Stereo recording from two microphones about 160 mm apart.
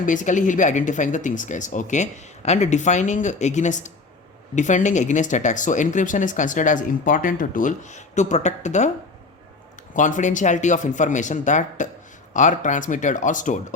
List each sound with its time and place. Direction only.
0.0 s speech: 50° left (ahead or behind)
9.9 s speech: 50° left (ahead or behind)